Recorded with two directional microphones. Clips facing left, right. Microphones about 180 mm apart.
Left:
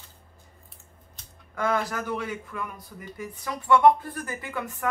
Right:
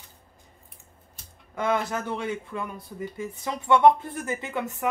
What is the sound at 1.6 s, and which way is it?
Speech, 25° right (ahead or behind).